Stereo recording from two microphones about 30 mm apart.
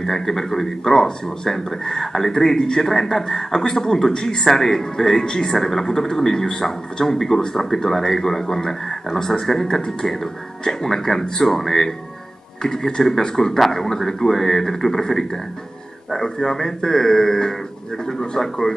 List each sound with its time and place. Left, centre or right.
0.0 s speech: centre
5.6 s speech: centre